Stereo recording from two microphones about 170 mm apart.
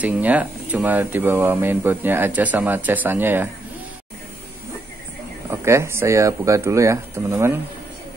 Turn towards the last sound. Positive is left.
turn(degrees=-15)  # may be behind; listen again after turning